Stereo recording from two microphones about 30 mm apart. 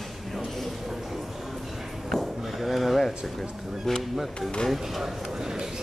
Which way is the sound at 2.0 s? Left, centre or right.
Centre.